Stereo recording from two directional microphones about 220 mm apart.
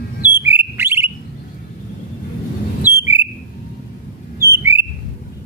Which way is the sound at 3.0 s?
10° right (ahead or behind).